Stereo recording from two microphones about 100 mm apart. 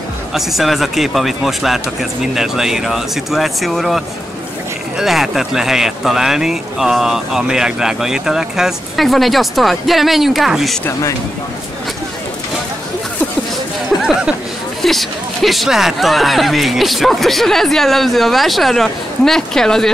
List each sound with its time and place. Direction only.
0.3 s speech: centre (ahead or behind)
10.9 s speech: 35° left (ahead or behind)
14.8 s speech: centre (ahead or behind)